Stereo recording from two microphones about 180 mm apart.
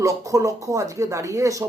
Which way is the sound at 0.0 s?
20° right (ahead or behind).